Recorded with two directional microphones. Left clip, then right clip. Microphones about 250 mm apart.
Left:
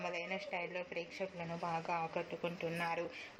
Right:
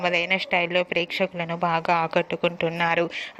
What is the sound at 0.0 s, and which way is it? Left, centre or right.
A woman's voice, right.